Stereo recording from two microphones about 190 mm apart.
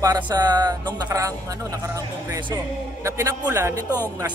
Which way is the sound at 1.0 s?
15° right (ahead or behind).